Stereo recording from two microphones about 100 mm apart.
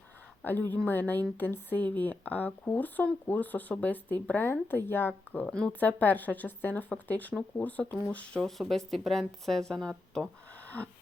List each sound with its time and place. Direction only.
0.4 s a woman's voice: 20° left (ahead or behind); by 10.2 s 5° left (ahead or behind)